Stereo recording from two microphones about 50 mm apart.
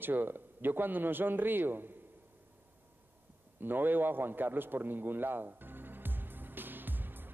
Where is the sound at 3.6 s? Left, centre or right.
Right.